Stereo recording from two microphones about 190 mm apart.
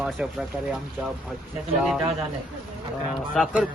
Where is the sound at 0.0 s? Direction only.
Centre (ahead or behind).